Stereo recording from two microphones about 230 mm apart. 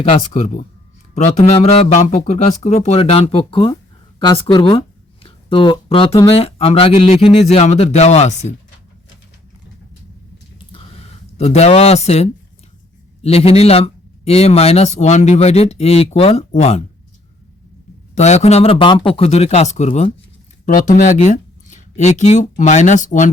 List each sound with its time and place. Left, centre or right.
0.0 s speech: left
10.7 s a sound: left
13.2 s speech: left
18.1 s speech: left